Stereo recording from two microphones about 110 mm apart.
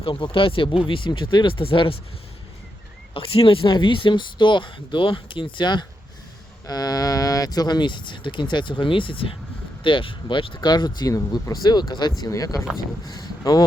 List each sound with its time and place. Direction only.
0.0 s speech: 50° left (ahead or behind)
3.2 s speech: 55° left (ahead or behind); by 13.7 s 35° left (ahead or behind)